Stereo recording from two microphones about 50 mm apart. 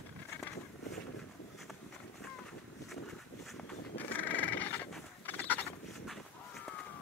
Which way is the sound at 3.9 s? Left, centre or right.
Left.